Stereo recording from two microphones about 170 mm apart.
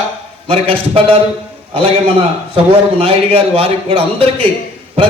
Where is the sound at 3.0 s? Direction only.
35° right (ahead or behind).